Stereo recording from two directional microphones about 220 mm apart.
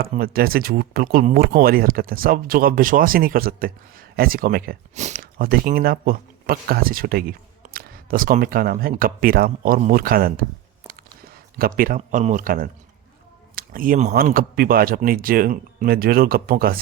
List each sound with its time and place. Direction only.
0.0 s speech: 45° right (ahead or behind)
10.8 s a sound: 40° right (ahead or behind)
11.8 s speech: 35° right (ahead or behind)